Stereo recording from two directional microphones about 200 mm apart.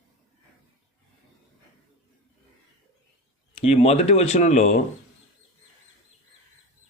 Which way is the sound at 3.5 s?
30° left (ahead or behind).